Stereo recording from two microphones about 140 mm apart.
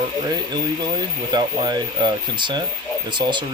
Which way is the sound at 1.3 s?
30° right (ahead or behind).